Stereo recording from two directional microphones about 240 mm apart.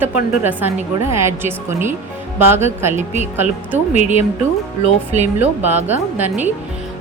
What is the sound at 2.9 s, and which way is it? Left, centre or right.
Speech, right.